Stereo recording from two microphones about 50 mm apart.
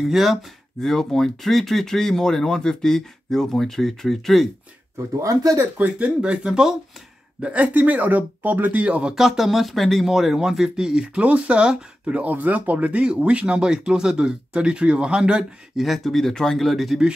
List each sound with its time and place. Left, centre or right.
0.0 s speech: centre
0.8 s speech: centre
4.9 s speech: right
5.8 s speech: right
7.4 s speech: right
9.1 s speech: centre
12.2 s speech: right; by 15.8 s centre
15.8 s speech: centre